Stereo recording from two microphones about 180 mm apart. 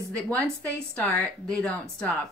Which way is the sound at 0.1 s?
5° left (ahead or behind).